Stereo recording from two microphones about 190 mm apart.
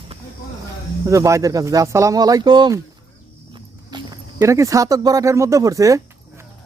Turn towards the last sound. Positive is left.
turn(degrees=-15)  # may be behind; listen again after turning